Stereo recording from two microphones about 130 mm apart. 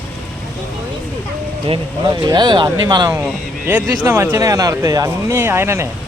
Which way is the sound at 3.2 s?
15° right (ahead or behind).